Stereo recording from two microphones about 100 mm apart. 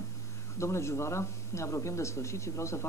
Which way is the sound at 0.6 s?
30° left (ahead or behind).